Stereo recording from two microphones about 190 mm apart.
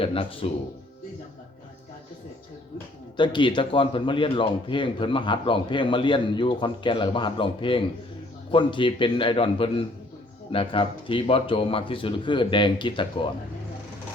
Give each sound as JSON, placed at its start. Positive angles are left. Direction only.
{"t": 0.0, "sound": "a man's voice", "side_deg": 30}
{"t": 3.2, "sound": "a man's voice", "side_deg": 25}